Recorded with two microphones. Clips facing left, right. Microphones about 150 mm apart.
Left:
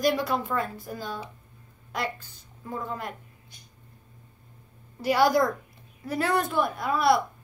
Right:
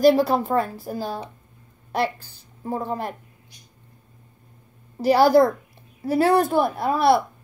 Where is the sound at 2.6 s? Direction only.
35° right (ahead or behind).